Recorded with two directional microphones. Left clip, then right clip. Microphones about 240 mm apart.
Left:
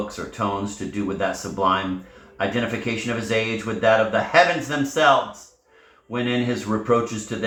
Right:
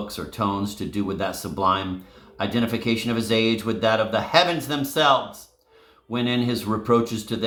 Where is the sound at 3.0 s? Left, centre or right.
Right.